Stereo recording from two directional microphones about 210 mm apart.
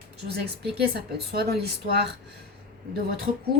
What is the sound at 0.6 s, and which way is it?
A woman's voice, 50° right (ahead or behind).